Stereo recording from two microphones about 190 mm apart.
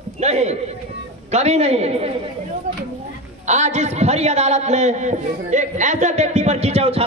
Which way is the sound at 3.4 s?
40° right (ahead or behind).